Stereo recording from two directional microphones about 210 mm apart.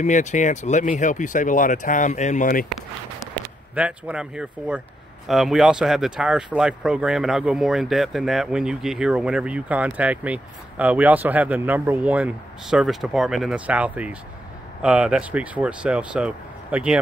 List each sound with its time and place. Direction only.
0.0 s speech: 35° left (ahead or behind)
3.7 s speech: 5° right (ahead or behind)